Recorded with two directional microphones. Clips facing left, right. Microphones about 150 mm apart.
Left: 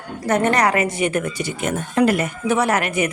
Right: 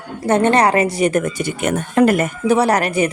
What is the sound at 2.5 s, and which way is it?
Speech, 35° right (ahead or behind).